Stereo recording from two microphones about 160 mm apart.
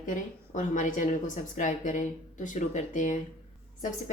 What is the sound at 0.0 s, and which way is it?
A woman's voice, 50° left (ahead or behind).